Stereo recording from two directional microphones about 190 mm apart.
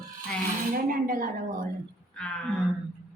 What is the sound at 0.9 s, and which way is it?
Speech, 45° right (ahead or behind).